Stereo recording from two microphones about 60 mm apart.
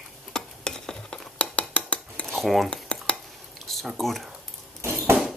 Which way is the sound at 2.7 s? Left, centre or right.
Centre.